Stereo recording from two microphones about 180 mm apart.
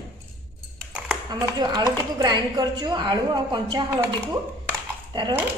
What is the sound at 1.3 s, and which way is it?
A woman's voice, 25° right (ahead or behind).